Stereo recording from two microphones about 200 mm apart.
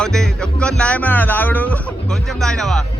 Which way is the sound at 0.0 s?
5° left (ahead or behind).